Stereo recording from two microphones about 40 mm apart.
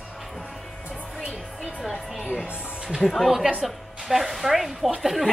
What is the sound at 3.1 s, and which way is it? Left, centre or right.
Speech, centre.